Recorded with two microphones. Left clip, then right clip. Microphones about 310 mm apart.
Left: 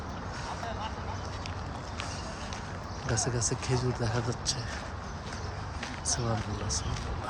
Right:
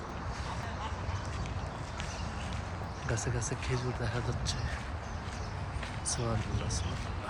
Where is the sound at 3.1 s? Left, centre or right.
Centre.